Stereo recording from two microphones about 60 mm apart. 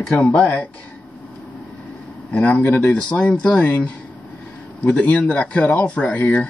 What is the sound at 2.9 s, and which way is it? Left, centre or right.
Speech, centre.